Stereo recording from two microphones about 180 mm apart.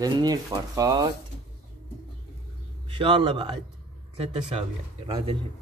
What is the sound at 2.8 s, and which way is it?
A man's voice, 30° right (ahead or behind).